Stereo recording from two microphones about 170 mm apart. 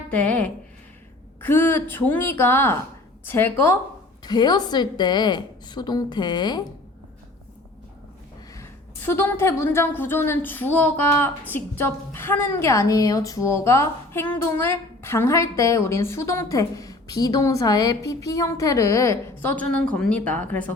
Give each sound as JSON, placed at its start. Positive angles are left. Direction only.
{"t": 0.1, "sound": "a woman's voice", "side_deg": 5}
{"t": 4.2, "sound": "a woman's voice", "side_deg": 25}
{"t": 9.0, "sound": "a woman's voice", "side_deg": 15}